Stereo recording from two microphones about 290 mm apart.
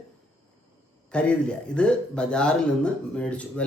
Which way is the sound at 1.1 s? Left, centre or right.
Centre.